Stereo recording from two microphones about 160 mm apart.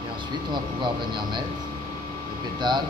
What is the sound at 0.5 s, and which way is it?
Speech, 30° right (ahead or behind).